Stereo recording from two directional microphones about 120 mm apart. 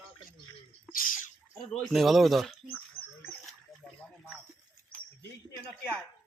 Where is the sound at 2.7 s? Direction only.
15° left (ahead or behind).